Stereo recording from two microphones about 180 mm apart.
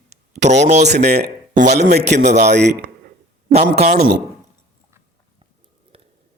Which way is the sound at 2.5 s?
70° right (ahead or behind).